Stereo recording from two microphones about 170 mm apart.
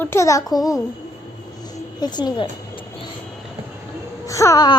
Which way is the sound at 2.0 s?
25° left (ahead or behind).